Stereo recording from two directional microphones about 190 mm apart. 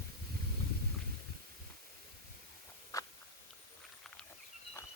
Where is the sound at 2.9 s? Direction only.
15° left (ahead or behind).